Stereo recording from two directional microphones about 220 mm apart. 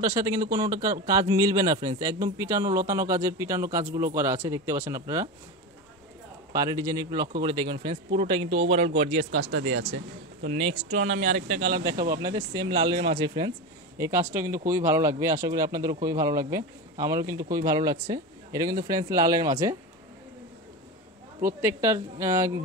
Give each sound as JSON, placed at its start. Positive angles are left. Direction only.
{"t": 0.0, "sound": "speech", "side_deg": -15}
{"t": 6.5, "sound": "speech", "side_deg": -15}
{"t": 9.5, "sound": "speech", "side_deg": -65}
{"t": 10.4, "sound": "speech", "side_deg": -30}
{"t": 11.8, "sound": "speech", "side_deg": -15}
{"t": 21.4, "sound": "speech", "side_deg": -10}